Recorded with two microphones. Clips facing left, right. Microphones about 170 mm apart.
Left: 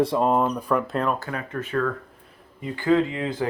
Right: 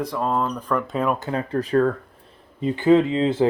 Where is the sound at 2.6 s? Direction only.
20° right (ahead or behind).